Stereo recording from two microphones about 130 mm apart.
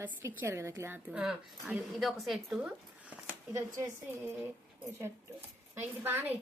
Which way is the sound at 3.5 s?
20° right (ahead or behind).